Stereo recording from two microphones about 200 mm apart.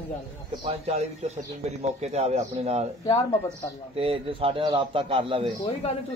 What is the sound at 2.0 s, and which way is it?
Speech, 30° right (ahead or behind).